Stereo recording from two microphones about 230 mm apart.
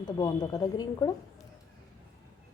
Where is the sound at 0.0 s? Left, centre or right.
Centre.